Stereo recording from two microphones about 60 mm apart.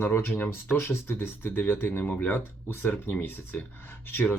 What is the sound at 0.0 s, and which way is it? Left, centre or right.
Speech, left.